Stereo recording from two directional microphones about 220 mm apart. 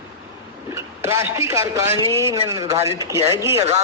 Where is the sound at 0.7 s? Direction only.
10° right (ahead or behind).